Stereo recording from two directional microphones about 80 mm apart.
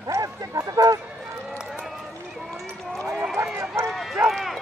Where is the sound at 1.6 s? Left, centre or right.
Centre.